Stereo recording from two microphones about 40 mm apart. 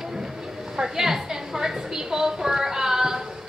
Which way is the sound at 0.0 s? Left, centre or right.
Centre.